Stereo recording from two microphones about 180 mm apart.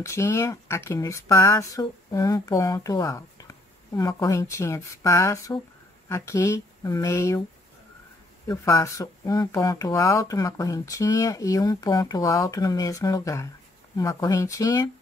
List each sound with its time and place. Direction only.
0.0 s speech: 15° left (ahead or behind)
8.5 s speech: 15° left (ahead or behind)